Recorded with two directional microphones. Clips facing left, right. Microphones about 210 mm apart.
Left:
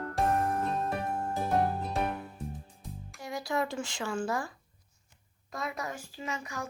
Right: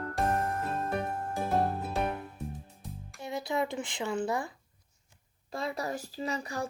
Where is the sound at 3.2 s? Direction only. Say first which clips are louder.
Right 1 dB; 20° right (ahead or behind).